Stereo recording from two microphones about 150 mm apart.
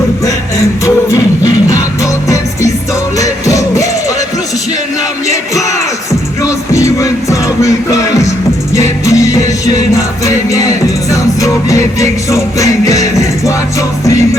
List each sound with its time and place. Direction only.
1.1 s music: 20° left (ahead or behind)
3.2 s music: 20° left (ahead or behind)
6.4 s music: 20° left (ahead or behind)